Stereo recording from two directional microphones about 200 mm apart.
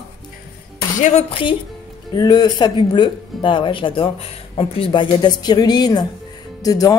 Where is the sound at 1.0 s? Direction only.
30° left (ahead or behind).